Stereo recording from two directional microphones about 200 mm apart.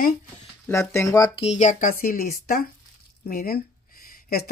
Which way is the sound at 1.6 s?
40° left (ahead or behind).